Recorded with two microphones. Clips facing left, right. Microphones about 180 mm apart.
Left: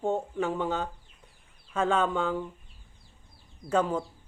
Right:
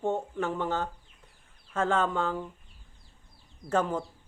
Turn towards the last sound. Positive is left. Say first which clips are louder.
# left 1 dB
turn(degrees=15)  # may be behind; listen again after turning